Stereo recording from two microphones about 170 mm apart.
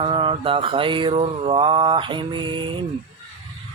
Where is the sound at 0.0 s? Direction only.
30° right (ahead or behind).